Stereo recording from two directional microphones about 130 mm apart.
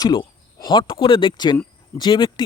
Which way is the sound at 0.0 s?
35° left (ahead or behind).